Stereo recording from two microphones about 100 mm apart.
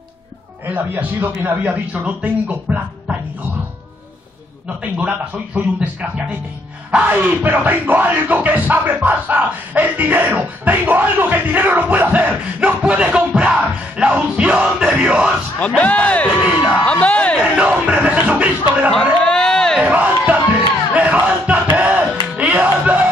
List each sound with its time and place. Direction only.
0.7 s speech: 20° right (ahead or behind)
4.9 s speech: 10° right (ahead or behind)
15.6 s speech: 15° left (ahead or behind)
17.6 s speech: 15° right (ahead or behind)
19.2 s crowd: 5° left (ahead or behind)
19.8 s a sound: 15° right (ahead or behind)
21.7 s music: 15° right (ahead or behind)